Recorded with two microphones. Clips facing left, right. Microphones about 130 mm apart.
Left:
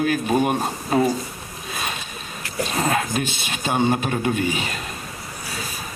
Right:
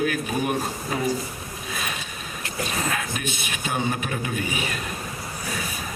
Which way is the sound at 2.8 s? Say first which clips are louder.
Left 6 dB; 30° left (ahead or behind).